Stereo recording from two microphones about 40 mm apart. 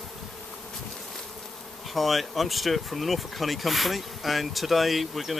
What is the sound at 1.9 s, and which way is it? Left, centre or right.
Speech, centre.